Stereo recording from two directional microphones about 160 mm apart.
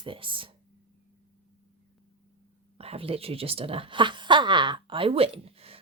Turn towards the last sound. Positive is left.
turn(degrees=-35)  # may be behind; listen again after turning